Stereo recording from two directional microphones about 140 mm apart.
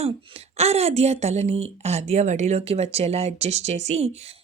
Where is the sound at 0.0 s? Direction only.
50° right (ahead or behind).